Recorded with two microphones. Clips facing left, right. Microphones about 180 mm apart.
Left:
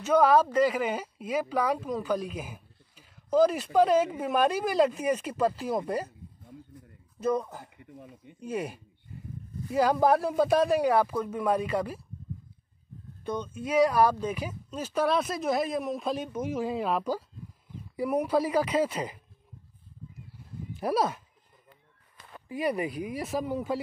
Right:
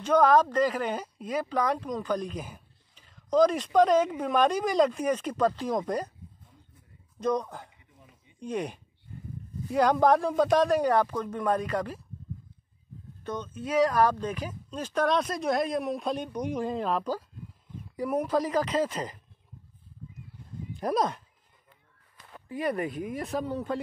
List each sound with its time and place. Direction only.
0.0 s speech: 10° left (ahead or behind)
7.2 s speech: 5° left (ahead or behind)
7.7 s a sound: 55° left (ahead or behind)
8.4 s speech: 5° left (ahead or behind)
13.2 s speech: 10° left (ahead or behind)
20.8 s speech: 5° left (ahead or behind)
22.7 s speech: 5° left (ahead or behind)